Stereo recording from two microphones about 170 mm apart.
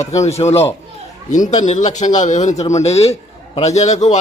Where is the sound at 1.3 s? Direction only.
45° left (ahead or behind).